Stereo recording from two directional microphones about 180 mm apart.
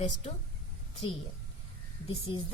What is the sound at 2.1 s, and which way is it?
Speech, 30° left (ahead or behind).